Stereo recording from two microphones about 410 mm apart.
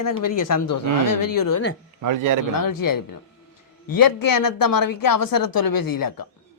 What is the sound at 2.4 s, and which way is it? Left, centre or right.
A man's voice, left.